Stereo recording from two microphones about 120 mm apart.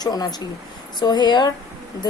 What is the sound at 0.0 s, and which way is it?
A woman's voice, 35° left (ahead or behind).